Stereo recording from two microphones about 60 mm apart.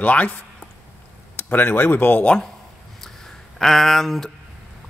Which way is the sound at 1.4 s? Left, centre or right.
Left.